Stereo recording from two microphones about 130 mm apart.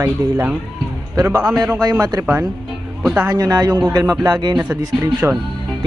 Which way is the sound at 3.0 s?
10° right (ahead or behind).